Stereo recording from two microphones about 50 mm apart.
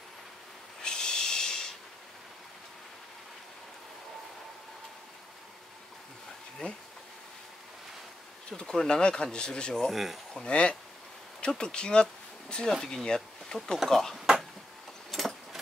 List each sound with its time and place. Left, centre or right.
0.8 s snort: centre
8.5 s speech: centre
9.8 s speech: centre
10.3 s cutlery: centre
11.4 s speech: centre
14.1 s a sound: centre